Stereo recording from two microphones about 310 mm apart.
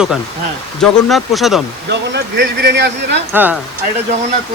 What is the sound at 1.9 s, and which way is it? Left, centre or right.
Speech, right.